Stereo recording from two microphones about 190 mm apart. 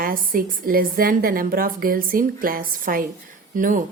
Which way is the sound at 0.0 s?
50° right (ahead or behind).